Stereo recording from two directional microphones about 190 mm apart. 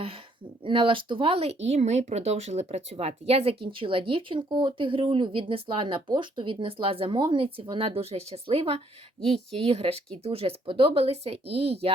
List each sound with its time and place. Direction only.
0.6 s speech: 25° right (ahead or behind)